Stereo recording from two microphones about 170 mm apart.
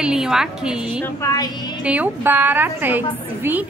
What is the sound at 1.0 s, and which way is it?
Speech, 20° left (ahead or behind).